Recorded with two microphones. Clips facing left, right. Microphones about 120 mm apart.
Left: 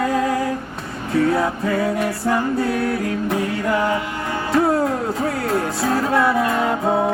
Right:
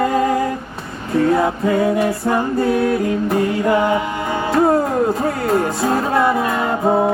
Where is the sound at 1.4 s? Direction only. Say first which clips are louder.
Right 4 dB; 20° right (ahead or behind).